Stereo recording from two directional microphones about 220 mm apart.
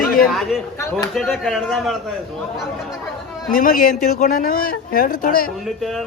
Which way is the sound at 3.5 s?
40° left (ahead or behind).